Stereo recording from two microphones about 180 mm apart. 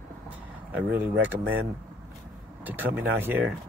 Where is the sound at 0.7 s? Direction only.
10° right (ahead or behind).